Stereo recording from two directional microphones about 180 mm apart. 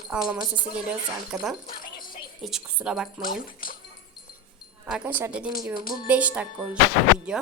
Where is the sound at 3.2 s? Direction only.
50° left (ahead or behind).